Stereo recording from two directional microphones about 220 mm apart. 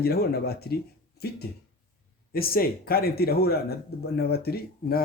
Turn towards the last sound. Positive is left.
turn(degrees=45)  # may be behind; listen again after turning